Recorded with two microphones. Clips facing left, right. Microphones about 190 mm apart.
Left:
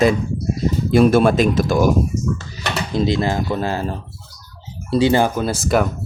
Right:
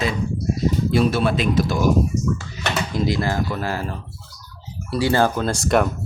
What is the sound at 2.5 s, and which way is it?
Speech, 25° left (ahead or behind).